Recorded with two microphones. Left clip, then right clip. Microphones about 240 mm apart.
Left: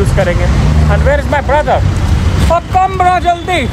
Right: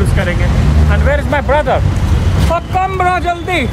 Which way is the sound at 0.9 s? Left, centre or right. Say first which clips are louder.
Left 3 dB; centre.